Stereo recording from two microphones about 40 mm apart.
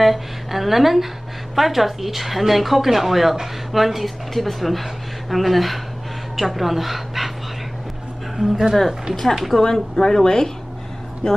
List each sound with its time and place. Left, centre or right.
0.0 s a woman's voice: centre
8.4 s a woman's voice: centre
9.9 s a woman's voice: centre